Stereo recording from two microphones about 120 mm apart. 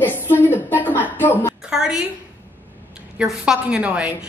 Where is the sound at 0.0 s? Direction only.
15° left (ahead or behind).